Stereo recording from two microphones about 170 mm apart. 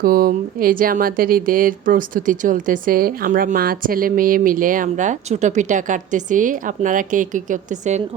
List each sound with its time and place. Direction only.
0.0 s speech: 60° right (ahead or behind)